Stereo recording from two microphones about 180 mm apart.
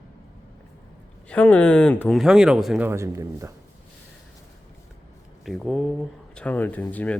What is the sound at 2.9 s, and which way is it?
Speech, 15° right (ahead or behind).